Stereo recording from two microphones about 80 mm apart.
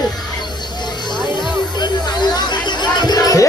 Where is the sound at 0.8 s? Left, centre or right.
Left.